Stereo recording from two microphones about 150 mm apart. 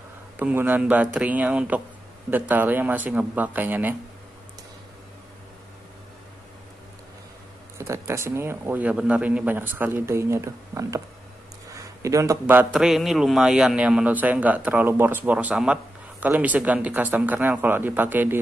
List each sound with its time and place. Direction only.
0.4 s a man's voice: 10° right (ahead or behind)
7.7 s a man's voice: 20° right (ahead or behind)
12.7 s a man's voice: centre (ahead or behind)